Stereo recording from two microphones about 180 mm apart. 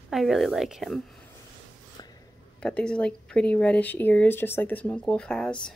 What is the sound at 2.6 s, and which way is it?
Speech, 5° left (ahead or behind).